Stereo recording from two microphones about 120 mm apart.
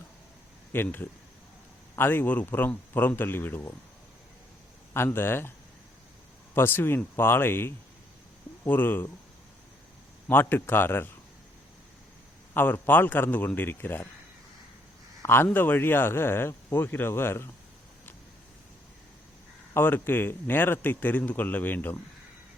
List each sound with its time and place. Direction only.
0.7 s speech: 15° left (ahead or behind)
4.9 s speech: 20° left (ahead or behind)
10.2 s speech: 15° left (ahead or behind)
12.5 s speech: 15° left (ahead or behind)
15.2 s a man's voice: 20° left (ahead or behind)
19.7 s speech: 15° left (ahead or behind)